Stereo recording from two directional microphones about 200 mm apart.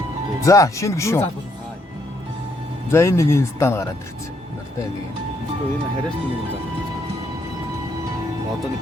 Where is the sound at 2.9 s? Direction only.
15° left (ahead or behind).